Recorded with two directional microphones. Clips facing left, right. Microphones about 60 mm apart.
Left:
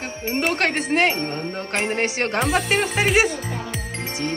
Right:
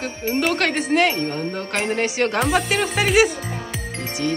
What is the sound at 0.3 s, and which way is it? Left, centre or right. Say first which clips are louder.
Speech: right 1 dB; left.